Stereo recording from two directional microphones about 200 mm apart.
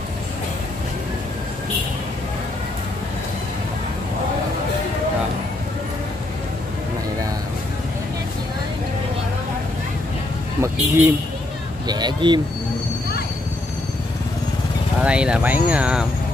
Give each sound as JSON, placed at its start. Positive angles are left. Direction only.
{"t": 10.6, "sound": "speech", "side_deg": -10}
{"t": 15.0, "sound": "speech", "side_deg": -5}